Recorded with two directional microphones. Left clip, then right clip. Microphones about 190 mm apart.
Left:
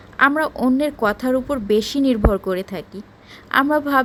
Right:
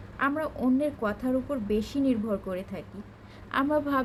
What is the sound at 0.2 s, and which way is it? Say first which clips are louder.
A woman's voice: left 12 dB; 50° left (ahead or behind).